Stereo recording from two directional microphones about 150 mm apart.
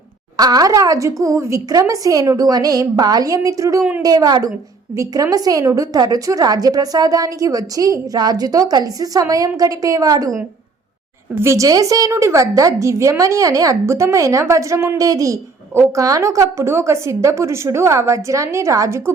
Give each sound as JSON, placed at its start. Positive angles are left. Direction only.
{"t": 0.3, "sound": "a woman's voice", "side_deg": -25}
{"t": 11.3, "sound": "a woman's voice", "side_deg": -20}